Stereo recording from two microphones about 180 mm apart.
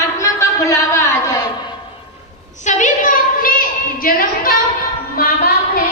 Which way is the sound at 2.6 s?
45° left (ahead or behind).